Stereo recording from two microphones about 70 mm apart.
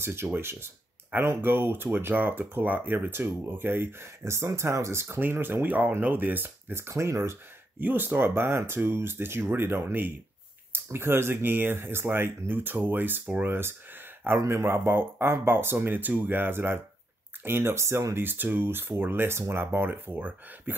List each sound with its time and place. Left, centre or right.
0.0 s speech: right
7.8 s speech: right
18.2 s speech: right